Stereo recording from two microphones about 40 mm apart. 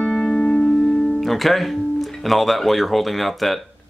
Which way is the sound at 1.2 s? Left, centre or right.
Centre.